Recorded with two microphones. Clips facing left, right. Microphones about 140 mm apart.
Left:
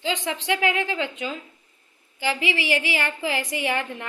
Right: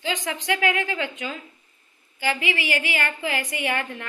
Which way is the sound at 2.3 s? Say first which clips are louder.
Left 2 dB; 30° left (ahead or behind).